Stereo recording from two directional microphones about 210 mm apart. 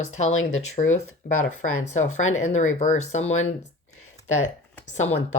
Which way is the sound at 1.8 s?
35° left (ahead or behind).